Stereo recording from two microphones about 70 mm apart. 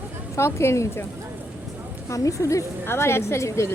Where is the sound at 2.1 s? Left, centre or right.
Left.